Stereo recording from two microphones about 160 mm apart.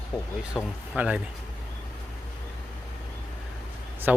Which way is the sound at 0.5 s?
5° right (ahead or behind).